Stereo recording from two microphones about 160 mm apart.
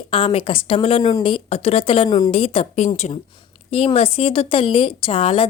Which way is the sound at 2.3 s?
35° left (ahead or behind).